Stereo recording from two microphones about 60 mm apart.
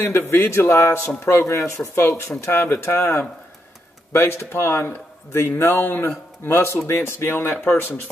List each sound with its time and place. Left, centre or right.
0.0 s a man's voice: left